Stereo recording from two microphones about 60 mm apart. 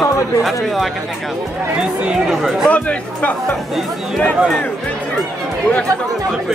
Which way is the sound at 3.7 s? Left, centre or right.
Centre.